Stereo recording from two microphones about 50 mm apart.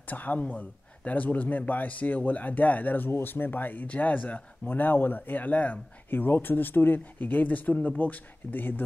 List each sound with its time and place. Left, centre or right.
0.1 s speech: left